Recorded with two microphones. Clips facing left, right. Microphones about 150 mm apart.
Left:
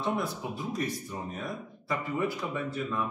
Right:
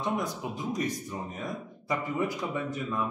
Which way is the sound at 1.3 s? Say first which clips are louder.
Right 1 dB; 15° right (ahead or behind).